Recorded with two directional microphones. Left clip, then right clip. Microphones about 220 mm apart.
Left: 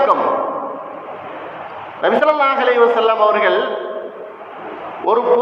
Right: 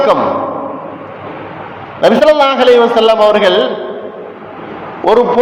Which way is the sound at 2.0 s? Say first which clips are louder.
Right 6 dB; 55° right (ahead or behind).